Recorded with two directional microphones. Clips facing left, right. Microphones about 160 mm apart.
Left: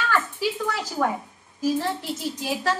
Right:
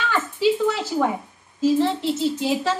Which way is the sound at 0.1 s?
20° right (ahead or behind).